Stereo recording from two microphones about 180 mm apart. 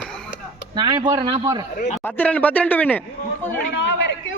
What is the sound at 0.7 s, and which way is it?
Speech, 25° right (ahead or behind).